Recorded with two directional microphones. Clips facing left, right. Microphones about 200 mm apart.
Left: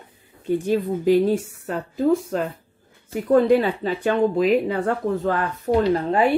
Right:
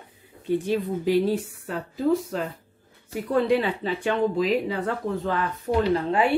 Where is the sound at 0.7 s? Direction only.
50° left (ahead or behind).